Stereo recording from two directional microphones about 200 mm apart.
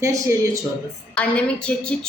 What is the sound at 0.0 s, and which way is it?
Speech, 15° right (ahead or behind).